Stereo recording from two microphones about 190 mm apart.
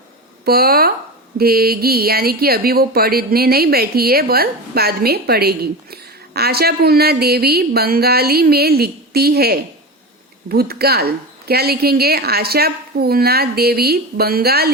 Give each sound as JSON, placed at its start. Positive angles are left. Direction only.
{"t": 0.4, "sound": "speech", "side_deg": -55}